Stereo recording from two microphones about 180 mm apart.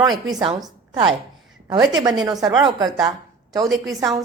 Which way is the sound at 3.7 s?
Centre (ahead or behind).